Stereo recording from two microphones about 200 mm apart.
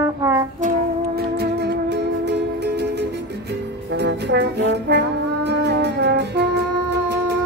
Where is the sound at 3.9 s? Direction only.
55° right (ahead or behind).